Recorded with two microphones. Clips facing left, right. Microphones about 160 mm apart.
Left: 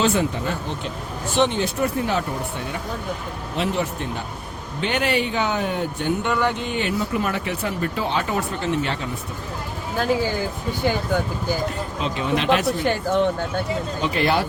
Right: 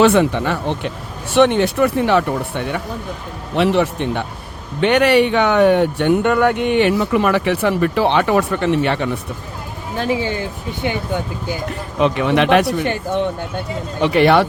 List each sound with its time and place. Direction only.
0.0 s speech: 75° right (ahead or behind)
10.1 s speech: 80° right
11.9 s speech: 65° right (ahead or behind)
14.0 s speech: 70° right (ahead or behind)